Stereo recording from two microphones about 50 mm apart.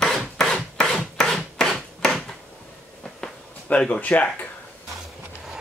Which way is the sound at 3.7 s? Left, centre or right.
Left.